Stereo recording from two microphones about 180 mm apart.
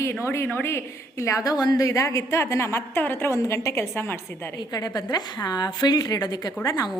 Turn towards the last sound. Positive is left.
turn(degrees=20)  # may be behind; listen again after turning